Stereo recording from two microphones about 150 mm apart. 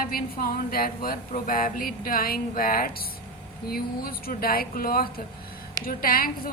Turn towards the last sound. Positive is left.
turn(degrees=75)  # may be behind; listen again after turning